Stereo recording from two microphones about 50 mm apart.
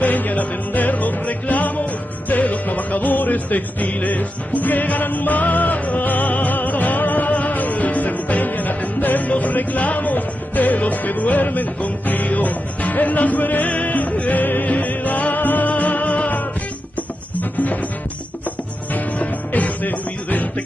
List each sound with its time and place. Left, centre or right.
0.0 s music: left
18.9 s music: left